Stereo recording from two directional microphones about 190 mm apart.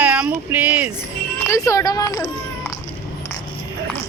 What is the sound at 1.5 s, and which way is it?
A child's voice, 15° left (ahead or behind).